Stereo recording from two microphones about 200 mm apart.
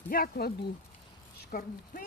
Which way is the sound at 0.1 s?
50° left (ahead or behind).